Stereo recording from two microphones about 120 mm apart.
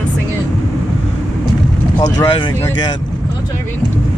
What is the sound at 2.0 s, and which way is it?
Speech, 35° left (ahead or behind).